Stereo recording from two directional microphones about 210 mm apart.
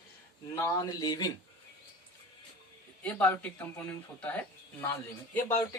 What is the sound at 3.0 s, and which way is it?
Speech, 5° left (ahead or behind).